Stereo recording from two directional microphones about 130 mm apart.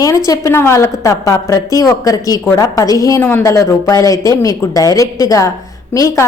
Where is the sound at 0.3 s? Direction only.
20° left (ahead or behind).